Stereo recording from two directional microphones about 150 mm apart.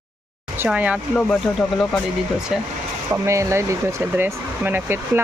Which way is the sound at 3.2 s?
20° right (ahead or behind).